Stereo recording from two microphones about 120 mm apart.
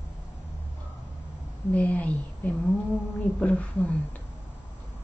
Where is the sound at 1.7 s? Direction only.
15° left (ahead or behind).